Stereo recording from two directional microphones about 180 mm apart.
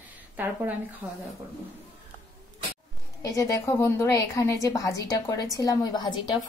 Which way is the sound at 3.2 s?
20° left (ahead or behind).